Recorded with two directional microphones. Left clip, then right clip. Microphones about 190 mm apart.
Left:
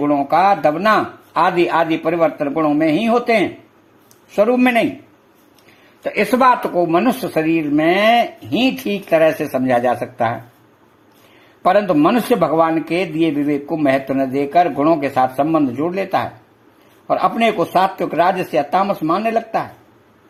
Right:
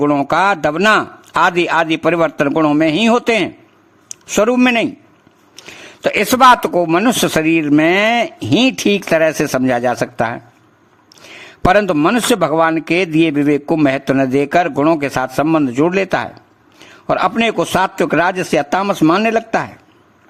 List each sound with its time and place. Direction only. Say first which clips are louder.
0.0 s speech: right 1 dB; 50° right (ahead or behind); by 10.4 s 30° right (ahead or behind)
11.6 s speech: right 1 dB; 35° right (ahead or behind)